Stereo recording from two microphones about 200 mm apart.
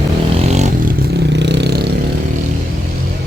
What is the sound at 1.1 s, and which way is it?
Vehicle, 60° right (ahead or behind).